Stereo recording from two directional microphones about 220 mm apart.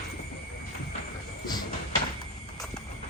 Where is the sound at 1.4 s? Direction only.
20° left (ahead or behind).